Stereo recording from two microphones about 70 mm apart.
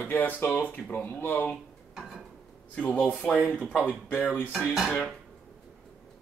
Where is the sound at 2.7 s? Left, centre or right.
Left.